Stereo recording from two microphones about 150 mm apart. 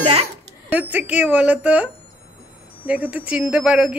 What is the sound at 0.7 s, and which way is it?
Speech, 10° right (ahead or behind).